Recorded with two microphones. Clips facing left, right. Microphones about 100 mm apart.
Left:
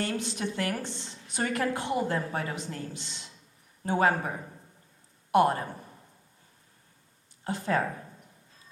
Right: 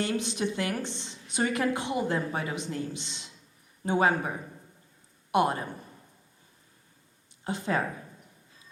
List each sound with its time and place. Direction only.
0.0 s speech: 20° right (ahead or behind)
5.3 s speech: 20° right (ahead or behind)
7.4 s speech: 20° right (ahead or behind)